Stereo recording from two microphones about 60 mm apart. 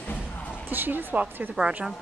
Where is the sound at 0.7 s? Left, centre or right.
Right.